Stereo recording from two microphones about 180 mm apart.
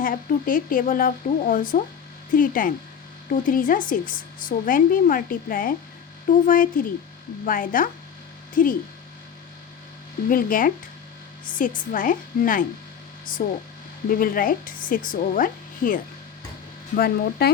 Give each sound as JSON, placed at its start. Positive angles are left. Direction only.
{"t": 0.0, "sound": "speech", "side_deg": 50}
{"t": 10.2, "sound": "speech", "side_deg": 50}
{"t": 11.9, "sound": "speech", "side_deg": 50}